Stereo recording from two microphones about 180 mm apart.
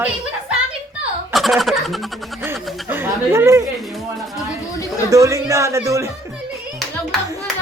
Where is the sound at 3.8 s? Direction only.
Centre (ahead or behind).